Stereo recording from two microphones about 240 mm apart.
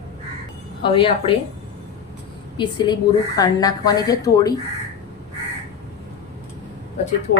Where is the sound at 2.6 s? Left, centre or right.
Centre.